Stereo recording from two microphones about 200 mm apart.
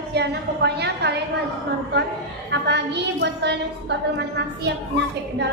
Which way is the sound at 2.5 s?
60° right (ahead or behind).